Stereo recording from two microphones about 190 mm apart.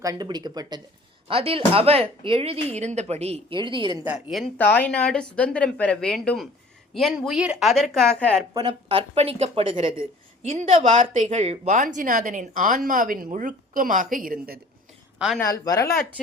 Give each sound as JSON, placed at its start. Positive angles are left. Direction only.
{"t": 0.0, "sound": "a woman's voice", "side_deg": -20}
{"t": 4.3, "sound": "speech", "side_deg": 5}
{"t": 8.5, "sound": "a woman's voice", "side_deg": -25}
{"t": 15.4, "sound": "speech", "side_deg": 15}